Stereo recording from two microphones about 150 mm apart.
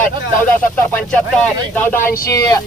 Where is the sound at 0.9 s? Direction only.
10° left (ahead or behind); by 2.6 s 25° left (ahead or behind).